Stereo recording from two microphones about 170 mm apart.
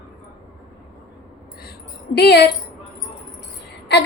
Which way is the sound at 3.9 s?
80° left.